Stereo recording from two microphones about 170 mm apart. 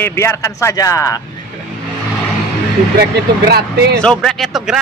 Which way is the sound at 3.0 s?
70° right (ahead or behind).